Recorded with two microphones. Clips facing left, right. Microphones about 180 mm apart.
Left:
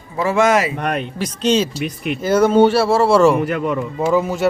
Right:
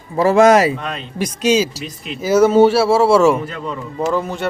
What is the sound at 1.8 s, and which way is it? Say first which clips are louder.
Speech: left 7 dB; 60° left (ahead or behind).